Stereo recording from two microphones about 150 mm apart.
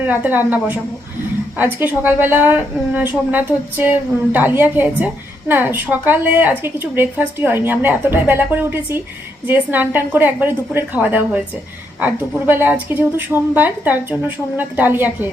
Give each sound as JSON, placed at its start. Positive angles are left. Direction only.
{"t": 0.0, "sound": "a woman's voice", "side_deg": -10}